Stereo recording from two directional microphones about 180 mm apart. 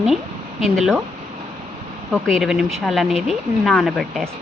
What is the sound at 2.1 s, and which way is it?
Speech, centre (ahead or behind).